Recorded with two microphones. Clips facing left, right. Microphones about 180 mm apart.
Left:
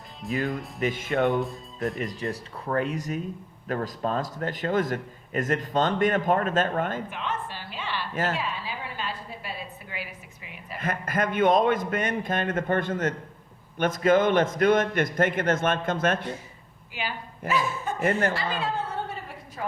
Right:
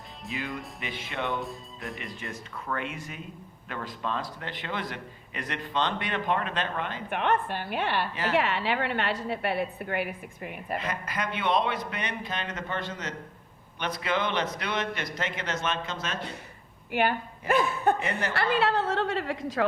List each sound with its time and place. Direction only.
0.3 s a man's voice: 45° left (ahead or behind)
1.4 s speech: centre (ahead or behind)
2.0 s a man's voice: 40° left (ahead or behind)
7.1 s a woman's voice: 60° right (ahead or behind)
8.3 s a woman's voice: 70° right (ahead or behind); by 10.8 s 55° right (ahead or behind)
10.8 s a man's voice: 50° left (ahead or behind)
16.9 s a woman's voice: 55° right (ahead or behind)
18.3 s a woman's voice: 70° right (ahead or behind); by 19.6 s 90° right